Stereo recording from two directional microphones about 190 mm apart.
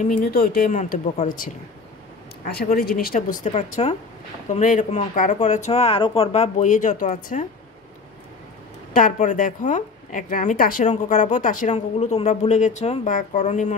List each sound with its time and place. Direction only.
0.0 s a woman's voice: 50° left (ahead or behind)
8.9 s a woman's voice: 45° left (ahead or behind)